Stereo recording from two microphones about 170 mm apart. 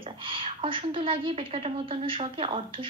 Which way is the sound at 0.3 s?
30° right (ahead or behind).